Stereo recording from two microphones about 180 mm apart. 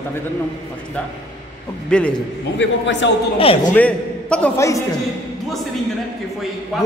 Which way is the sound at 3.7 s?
5° left (ahead or behind).